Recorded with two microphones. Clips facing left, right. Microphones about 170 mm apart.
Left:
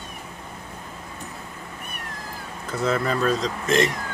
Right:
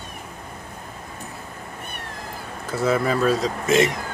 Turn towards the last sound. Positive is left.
turn(degrees=-5)  # may be behind; listen again after turning